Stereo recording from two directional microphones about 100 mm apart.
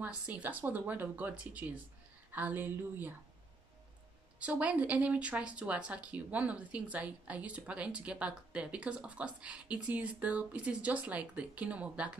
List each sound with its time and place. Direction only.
0.0 s speech: 15° right (ahead or behind)
4.4 s speech: 15° right (ahead or behind)